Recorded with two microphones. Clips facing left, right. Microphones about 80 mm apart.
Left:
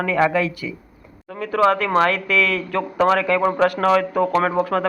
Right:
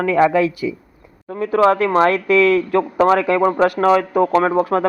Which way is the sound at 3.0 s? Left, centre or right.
Right.